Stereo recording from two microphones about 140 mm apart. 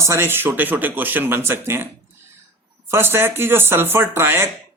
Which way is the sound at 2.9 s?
15° right (ahead or behind).